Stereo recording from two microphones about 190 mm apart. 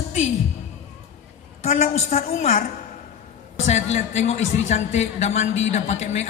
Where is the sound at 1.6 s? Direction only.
35° left (ahead or behind).